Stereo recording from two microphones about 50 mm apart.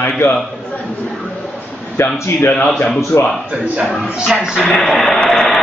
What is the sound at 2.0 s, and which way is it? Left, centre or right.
Speech, left.